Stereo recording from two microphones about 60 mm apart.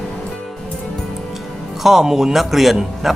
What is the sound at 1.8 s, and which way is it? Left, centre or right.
Speech, centre.